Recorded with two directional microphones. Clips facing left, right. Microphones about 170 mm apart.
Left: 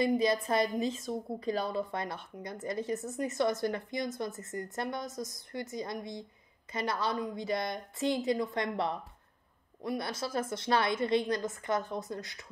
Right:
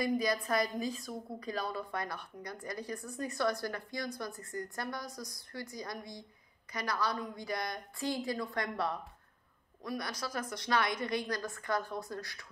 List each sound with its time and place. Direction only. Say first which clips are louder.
0.0 s a woman's voice: left 4 dB; 25° left (ahead or behind)